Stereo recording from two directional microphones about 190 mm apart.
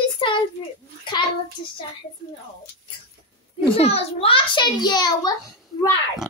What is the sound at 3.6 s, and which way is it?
A child's voice, 30° left (ahead or behind).